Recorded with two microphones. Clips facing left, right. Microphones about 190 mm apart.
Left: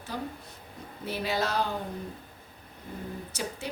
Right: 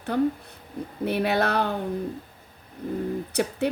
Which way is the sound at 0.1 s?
60° right (ahead or behind).